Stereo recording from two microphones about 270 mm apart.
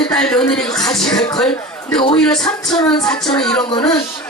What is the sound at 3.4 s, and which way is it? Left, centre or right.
Speech, centre.